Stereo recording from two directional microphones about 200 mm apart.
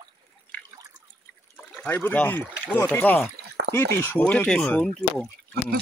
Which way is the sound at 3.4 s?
55° right (ahead or behind).